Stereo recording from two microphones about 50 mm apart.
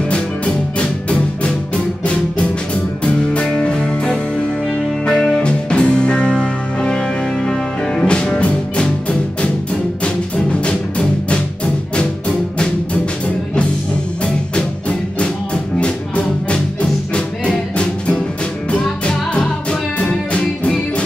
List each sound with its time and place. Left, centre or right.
2.0 s music: left
5.4 s music: centre
10.0 s music: left
14.2 s music: left